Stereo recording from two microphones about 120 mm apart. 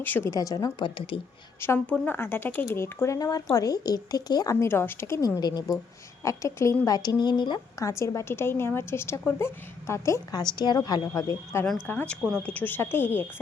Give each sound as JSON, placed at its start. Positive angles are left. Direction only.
{"t": 0.0, "sound": "a woman's voice", "side_deg": 15}
{"t": 0.3, "sound": "a woman's voice", "side_deg": 30}
{"t": 0.9, "sound": "speech", "side_deg": 45}
{"t": 1.6, "sound": "a woman's voice", "side_deg": 15}
{"t": 4.6, "sound": "a woman's voice", "side_deg": 20}
{"t": 5.4, "sound": "a woman's voice", "side_deg": 35}
{"t": 7.9, "sound": "a woman's voice", "side_deg": 25}
{"t": 10.4, "sound": "a woman's voice", "side_deg": 35}
{"t": 11.9, "sound": "a woman's voice", "side_deg": 15}